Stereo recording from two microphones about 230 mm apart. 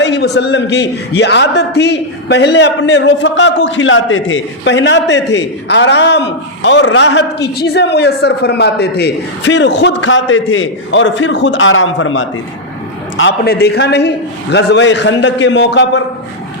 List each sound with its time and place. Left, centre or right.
0.0 s a man's voice: left